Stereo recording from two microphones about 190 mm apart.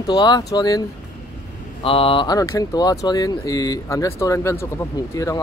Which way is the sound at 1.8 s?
30° left (ahead or behind).